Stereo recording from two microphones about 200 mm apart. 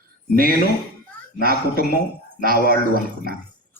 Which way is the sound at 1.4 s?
50° right (ahead or behind).